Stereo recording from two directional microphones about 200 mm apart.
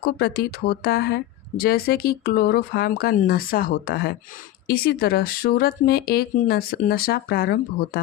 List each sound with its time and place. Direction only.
0.0 s speech: 50° left (ahead or behind)